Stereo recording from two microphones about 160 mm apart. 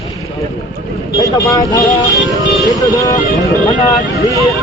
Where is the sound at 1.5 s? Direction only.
20° left (ahead or behind).